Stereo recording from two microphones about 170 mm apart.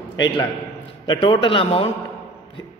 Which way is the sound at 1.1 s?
30° left (ahead or behind).